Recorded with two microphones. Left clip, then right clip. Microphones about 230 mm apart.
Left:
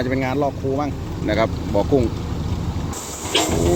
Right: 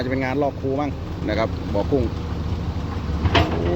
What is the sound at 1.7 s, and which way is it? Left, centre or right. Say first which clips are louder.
Speech: left 4 dB; centre.